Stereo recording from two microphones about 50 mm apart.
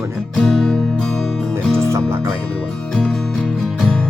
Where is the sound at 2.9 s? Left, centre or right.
Centre.